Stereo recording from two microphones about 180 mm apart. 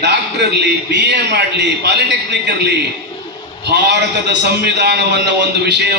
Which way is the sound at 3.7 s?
70° right (ahead or behind).